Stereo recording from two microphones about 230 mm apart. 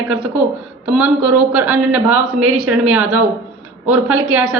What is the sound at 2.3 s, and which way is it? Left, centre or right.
Speech, right.